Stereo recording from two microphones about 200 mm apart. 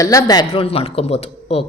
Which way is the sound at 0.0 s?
15° left (ahead or behind).